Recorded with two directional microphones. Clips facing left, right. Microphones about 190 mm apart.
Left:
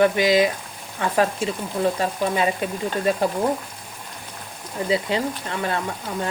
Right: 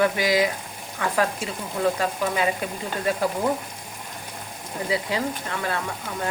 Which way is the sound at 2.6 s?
25° left (ahead or behind).